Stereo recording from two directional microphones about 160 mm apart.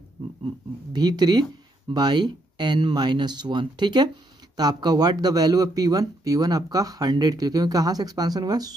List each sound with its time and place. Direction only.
0.9 s speech: 25° right (ahead or behind)